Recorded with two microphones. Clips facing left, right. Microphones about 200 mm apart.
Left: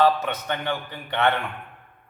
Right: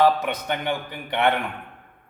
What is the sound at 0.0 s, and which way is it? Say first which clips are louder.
A man's voice: right 1 dB; 15° right (ahead or behind).